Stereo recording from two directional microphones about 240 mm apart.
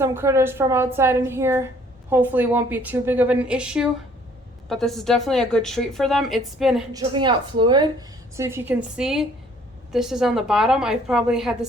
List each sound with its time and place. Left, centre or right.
0.0 s a woman's voice: centre
6.9 s a woman's voice: centre